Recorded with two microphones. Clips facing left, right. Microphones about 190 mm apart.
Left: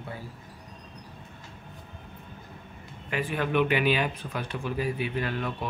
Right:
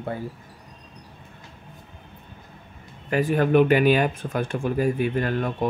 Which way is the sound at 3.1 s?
40° right (ahead or behind).